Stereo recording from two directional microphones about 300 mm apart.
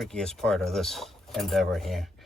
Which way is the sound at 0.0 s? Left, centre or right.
Centre.